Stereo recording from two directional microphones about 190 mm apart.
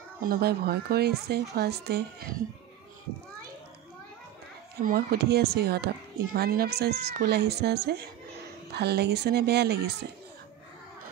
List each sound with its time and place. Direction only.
0.2 s speech: 55° right (ahead or behind)
4.8 s speech: 55° right (ahead or behind)